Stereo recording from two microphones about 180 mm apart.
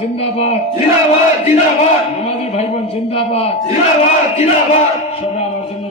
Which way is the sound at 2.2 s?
35° left (ahead or behind).